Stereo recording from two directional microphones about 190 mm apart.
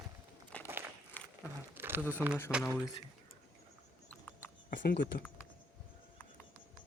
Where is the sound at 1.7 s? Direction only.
10° right (ahead or behind).